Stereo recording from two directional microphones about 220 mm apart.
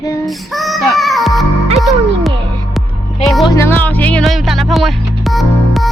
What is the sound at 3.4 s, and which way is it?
Music, 15° left (ahead or behind).